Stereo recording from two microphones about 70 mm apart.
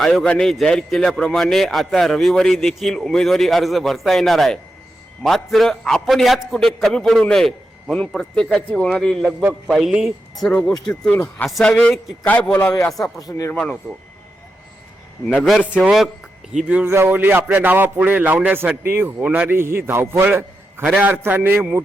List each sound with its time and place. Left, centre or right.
0.0 s a man's voice: centre
9.6 s a man's voice: centre
11.1 s a man's voice: left
13.0 s speech: left
15.4 s a man's voice: centre
16.5 s speech: centre
16.8 s a man's voice: right
19.5 s a man's voice: right